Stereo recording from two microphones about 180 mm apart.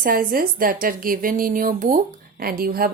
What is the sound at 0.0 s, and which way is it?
Speech, 55° right (ahead or behind).